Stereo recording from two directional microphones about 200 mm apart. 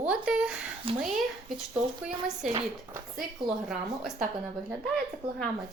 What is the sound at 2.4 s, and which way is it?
Speech, 5° right (ahead or behind).